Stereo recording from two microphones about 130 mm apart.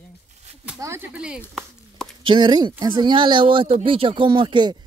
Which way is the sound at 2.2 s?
40° right (ahead or behind).